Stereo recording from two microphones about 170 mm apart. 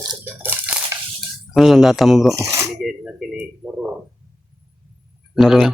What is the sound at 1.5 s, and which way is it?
Speech, centre (ahead or behind).